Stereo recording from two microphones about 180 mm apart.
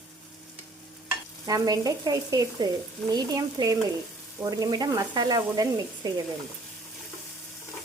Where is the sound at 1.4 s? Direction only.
20° right (ahead or behind).